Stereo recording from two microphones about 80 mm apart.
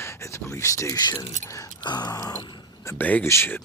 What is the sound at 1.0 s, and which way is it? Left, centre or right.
Speech, left.